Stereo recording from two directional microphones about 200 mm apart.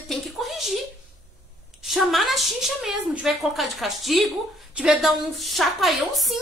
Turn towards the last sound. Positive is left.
turn(degrees=0)  # may be behind; listen again after turning